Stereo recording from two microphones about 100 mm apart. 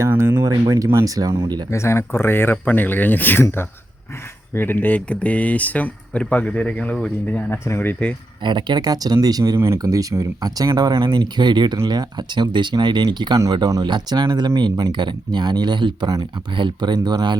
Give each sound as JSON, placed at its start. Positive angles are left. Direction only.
{"t": 0.2, "sound": "speech", "side_deg": -25}
{"t": 0.4, "sound": "speech", "side_deg": -40}
{"t": 1.7, "sound": "speech", "side_deg": 25}
{"t": 8.4, "sound": "speech", "side_deg": -50}